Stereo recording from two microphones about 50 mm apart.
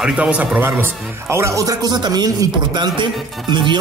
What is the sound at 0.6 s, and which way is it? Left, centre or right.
Speech, right.